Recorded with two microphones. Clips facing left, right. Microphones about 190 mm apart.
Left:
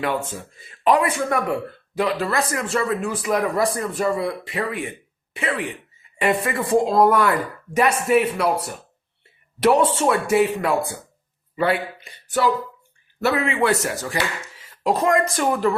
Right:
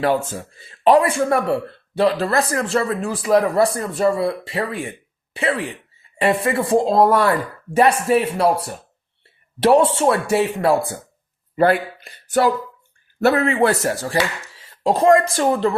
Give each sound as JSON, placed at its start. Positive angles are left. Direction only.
{"t": 0.6, "sound": "speech", "side_deg": -30}
{"t": 11.5, "sound": "speech", "side_deg": -50}